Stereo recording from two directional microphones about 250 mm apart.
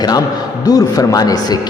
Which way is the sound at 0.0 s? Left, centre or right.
Centre.